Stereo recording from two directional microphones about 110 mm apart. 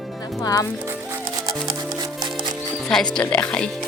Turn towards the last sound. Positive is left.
turn(degrees=10)  # may be behind; listen again after turning